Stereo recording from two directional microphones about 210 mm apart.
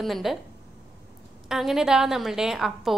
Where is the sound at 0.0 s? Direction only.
Centre (ahead or behind).